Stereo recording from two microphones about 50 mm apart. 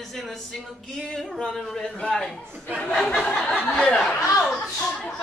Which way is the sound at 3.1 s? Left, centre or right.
Centre.